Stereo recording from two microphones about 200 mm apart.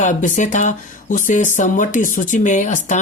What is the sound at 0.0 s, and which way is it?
Speech, 40° left (ahead or behind).